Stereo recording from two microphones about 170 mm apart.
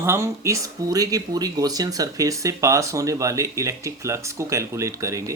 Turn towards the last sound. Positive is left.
turn(degrees=-20)  # may be behind; listen again after turning